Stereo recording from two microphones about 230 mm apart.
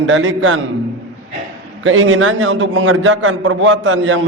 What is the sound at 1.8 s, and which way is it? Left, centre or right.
A man's voice, right.